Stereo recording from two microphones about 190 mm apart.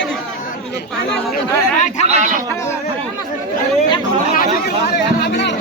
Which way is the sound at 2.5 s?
15° left (ahead or behind).